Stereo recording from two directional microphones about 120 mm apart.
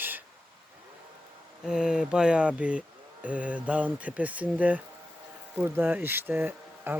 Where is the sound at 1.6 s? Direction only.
5° right (ahead or behind).